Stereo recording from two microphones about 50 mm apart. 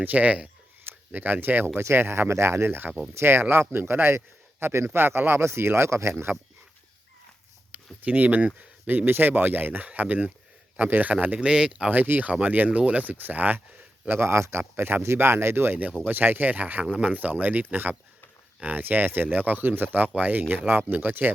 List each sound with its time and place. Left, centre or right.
0.0 s speech: right
0.9 s speech: right
1.6 s speech: right
4.6 s speech: right
4.9 s speech: right
7.7 s speech: right
10.8 s speech: right
11.4 s speech: centre
11.9 s speech: right
14.1 s speech: right
14.8 s speech: right
15.0 s speech: right